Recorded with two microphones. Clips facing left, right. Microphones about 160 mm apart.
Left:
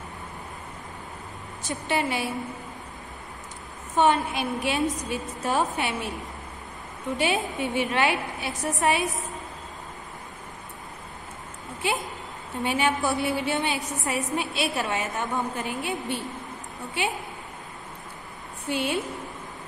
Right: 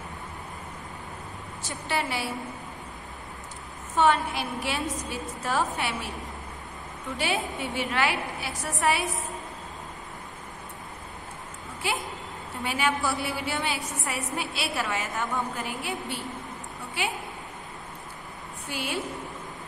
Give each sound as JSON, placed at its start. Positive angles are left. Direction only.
{"t": 1.6, "sound": "a woman's voice", "side_deg": 20}
{"t": 3.9, "sound": "a woman's voice", "side_deg": 20}
{"t": 7.2, "sound": "a woman's voice", "side_deg": 20}
{"t": 11.8, "sound": "a woman's voice", "side_deg": 20}
{"t": 18.7, "sound": "a woman's voice", "side_deg": 20}